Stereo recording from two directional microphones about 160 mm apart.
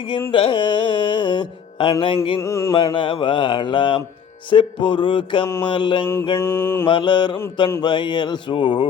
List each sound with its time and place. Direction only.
0.3 s music: 35° left (ahead or behind)
2.4 s mantra: 15° left (ahead or behind)
2.7 s music: 30° left (ahead or behind)
5.6 s mantra: 30° left (ahead or behind)
6.4 s mantra: 15° left (ahead or behind)
6.8 s mantra: 30° left (ahead or behind)